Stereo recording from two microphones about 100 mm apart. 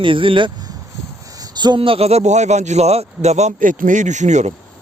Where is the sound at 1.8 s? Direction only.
75° right (ahead or behind); by 3.5 s 90° right.